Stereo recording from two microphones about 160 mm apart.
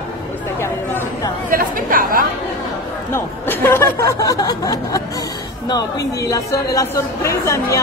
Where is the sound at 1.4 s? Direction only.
60° right (ahead or behind).